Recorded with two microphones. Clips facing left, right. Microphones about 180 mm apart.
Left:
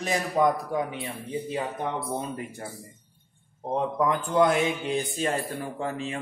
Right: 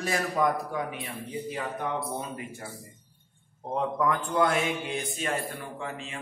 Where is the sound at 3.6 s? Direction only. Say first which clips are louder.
Left 2 dB; 25° left (ahead or behind).